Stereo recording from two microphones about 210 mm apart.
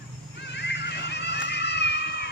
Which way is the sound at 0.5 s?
55° left (ahead or behind).